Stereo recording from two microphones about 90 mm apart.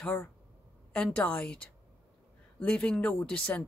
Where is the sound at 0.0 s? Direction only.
20° left (ahead or behind).